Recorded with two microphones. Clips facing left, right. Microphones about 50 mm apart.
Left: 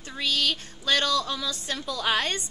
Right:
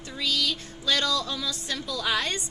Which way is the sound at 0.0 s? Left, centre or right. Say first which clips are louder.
Left 1 dB; left.